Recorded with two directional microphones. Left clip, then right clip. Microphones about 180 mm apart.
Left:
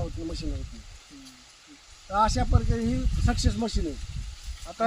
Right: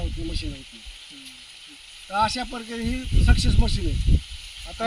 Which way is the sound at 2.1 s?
15° left (ahead or behind).